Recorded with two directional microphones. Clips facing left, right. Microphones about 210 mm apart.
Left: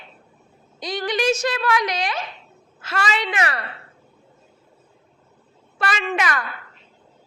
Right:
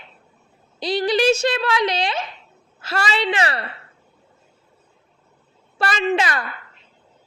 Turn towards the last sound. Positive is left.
turn(degrees=-25)  # may be behind; listen again after turning